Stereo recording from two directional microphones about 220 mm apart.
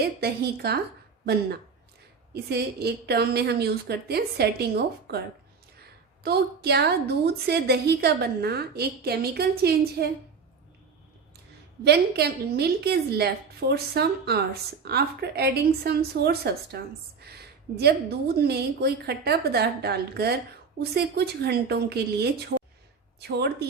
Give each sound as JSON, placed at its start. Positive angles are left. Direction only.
{"t": 0.0, "sound": "a woman's voice", "side_deg": -45}
{"t": 6.2, "sound": "a woman's voice", "side_deg": -45}
{"t": 11.9, "sound": "a woman's voice", "side_deg": -50}